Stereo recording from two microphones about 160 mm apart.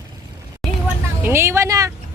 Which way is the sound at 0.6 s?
Centre (ahead or behind).